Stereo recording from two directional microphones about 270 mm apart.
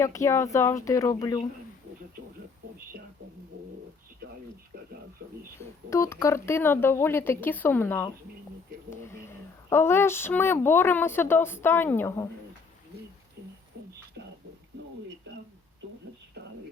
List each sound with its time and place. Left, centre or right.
0.0 s speech: centre
5.9 s speech: centre